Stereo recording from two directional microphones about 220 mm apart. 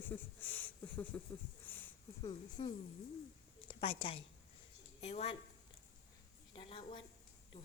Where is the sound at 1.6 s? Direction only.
10° left (ahead or behind).